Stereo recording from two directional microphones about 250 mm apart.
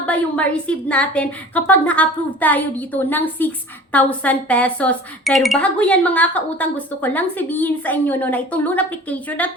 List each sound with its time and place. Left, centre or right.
0.0 s speech: centre